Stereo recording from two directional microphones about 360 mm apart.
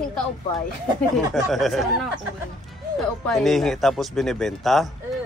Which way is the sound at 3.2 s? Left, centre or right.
Centre.